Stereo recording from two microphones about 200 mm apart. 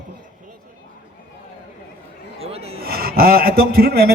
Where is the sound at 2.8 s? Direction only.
50° right (ahead or behind).